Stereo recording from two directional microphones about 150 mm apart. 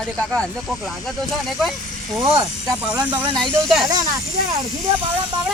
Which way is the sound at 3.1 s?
30° right (ahead or behind).